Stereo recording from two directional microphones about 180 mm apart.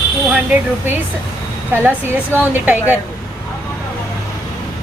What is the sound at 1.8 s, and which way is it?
Speech, 10° right (ahead or behind).